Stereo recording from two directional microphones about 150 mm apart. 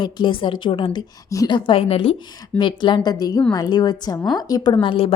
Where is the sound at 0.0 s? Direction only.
35° left (ahead or behind).